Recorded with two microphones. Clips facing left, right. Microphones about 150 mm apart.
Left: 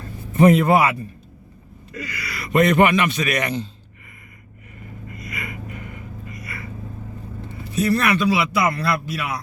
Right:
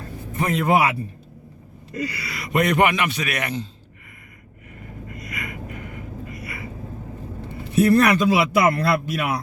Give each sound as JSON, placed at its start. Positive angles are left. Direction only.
{"t": 0.7, "sound": "a man's voice", "side_deg": -15}
{"t": 1.9, "sound": "gasp", "side_deg": -35}
{"t": 2.5, "sound": "a man's voice", "side_deg": -10}
{"t": 5.3, "sound": "gasp", "side_deg": 0}
{"t": 7.8, "sound": "a man's voice", "side_deg": -50}